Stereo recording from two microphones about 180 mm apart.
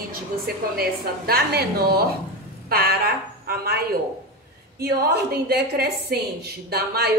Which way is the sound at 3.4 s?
60° right (ahead or behind).